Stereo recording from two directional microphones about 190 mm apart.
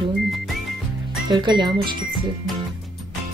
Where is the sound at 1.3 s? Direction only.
25° right (ahead or behind).